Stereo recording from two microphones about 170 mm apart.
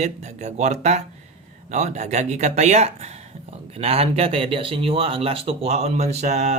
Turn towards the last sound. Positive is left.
turn(degrees=-40)  # may be behind; listen again after turning